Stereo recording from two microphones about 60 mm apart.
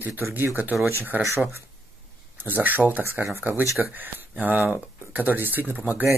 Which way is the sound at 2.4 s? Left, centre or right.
Right.